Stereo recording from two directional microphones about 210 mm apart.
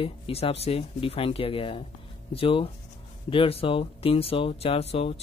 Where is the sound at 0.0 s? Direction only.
30° left (ahead or behind).